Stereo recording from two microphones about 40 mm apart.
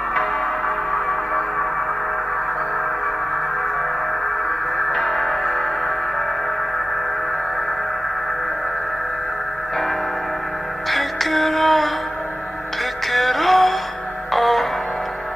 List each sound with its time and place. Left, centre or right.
0.1 s music: centre
4.7 s music: left
5.0 s music: centre
10.9 s music: centre
13.1 s music: centre